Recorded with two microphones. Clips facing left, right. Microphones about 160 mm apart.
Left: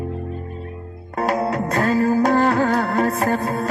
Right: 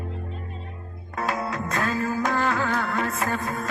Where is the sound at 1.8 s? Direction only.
40° left (ahead or behind).